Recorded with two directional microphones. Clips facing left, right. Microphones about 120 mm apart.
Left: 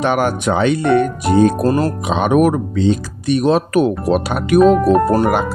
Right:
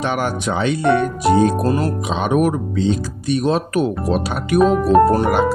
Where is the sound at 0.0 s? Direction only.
55° left (ahead or behind).